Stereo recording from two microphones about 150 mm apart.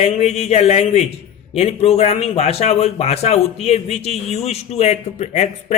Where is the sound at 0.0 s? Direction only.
50° left (ahead or behind).